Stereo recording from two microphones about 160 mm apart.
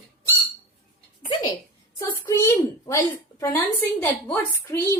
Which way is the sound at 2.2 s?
20° left (ahead or behind).